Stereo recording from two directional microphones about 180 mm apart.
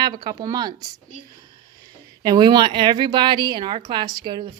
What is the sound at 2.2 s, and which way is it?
A woman's voice, 20° right (ahead or behind).